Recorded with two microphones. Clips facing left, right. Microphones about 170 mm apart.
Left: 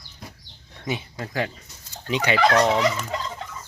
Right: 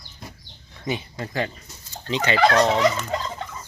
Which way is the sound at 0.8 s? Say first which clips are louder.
Right 1 dB; 5° left (ahead or behind).